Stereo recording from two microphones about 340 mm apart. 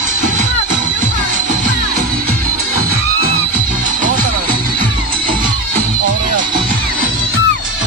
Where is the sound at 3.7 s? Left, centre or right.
Right.